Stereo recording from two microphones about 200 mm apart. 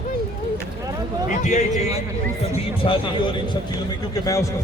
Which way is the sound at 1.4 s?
35° left (ahead or behind).